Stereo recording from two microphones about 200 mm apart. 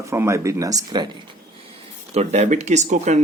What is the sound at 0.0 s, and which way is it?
Speech, 15° right (ahead or behind).